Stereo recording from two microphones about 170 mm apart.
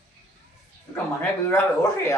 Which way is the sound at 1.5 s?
15° left (ahead or behind).